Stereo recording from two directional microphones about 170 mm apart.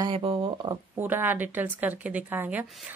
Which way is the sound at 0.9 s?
10° right (ahead or behind).